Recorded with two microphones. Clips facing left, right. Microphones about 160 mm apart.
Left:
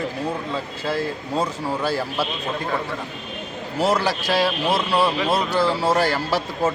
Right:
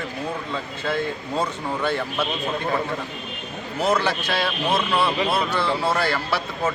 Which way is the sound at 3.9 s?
40° left (ahead or behind).